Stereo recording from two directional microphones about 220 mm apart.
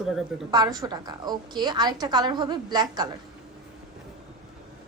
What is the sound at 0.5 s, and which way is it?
A woman's voice, 20° right (ahead or behind).